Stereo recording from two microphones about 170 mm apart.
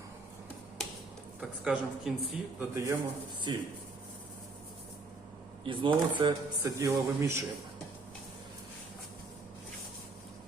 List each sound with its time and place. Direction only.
1.4 s speech: 5° right (ahead or behind)
2.7 s a man's voice: 15° right (ahead or behind)
3.5 s speech: 30° right (ahead or behind)
5.6 s speech: 30° right (ahead or behind)
6.6 s a man's voice: 15° right (ahead or behind)